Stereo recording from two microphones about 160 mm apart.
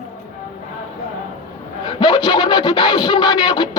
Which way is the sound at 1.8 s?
30° left (ahead or behind).